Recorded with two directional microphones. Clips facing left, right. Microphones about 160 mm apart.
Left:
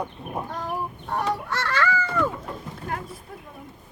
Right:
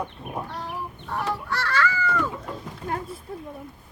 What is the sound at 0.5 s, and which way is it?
Chicken, 45° left (ahead or behind).